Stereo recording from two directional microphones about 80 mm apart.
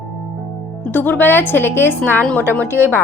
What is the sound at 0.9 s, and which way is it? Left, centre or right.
A woman's voice, left.